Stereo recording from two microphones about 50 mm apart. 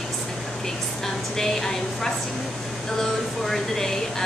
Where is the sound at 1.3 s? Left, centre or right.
Centre.